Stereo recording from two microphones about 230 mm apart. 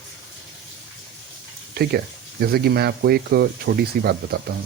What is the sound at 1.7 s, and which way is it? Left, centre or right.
Speech, right.